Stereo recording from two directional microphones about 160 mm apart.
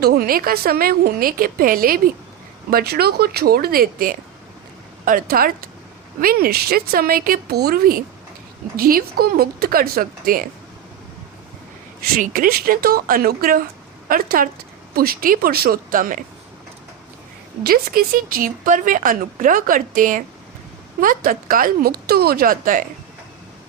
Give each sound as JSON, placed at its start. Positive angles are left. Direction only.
{"t": 0.0, "sound": "a woman's voice", "side_deg": -70}
{"t": 2.6, "sound": "a woman's voice", "side_deg": -75}
{"t": 12.1, "sound": "a woman's voice", "side_deg": -60}
{"t": 17.6, "sound": "speech", "side_deg": -70}